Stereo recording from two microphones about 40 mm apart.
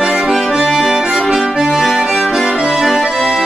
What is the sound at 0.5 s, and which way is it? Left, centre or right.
Accordion, centre.